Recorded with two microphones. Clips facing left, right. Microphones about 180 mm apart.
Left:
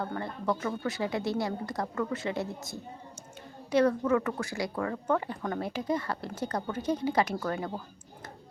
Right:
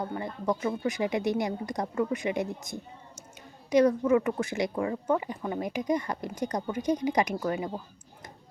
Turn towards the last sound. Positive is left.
turn(degrees=-15)  # may be behind; listen again after turning